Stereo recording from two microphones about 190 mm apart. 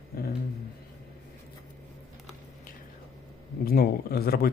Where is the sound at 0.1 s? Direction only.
50° left (ahead or behind).